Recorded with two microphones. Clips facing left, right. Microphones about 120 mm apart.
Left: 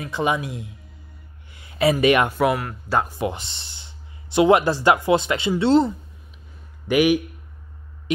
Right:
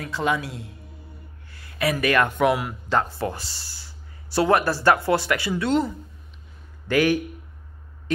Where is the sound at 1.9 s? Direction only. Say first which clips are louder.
Left 2 dB; 15° left (ahead or behind).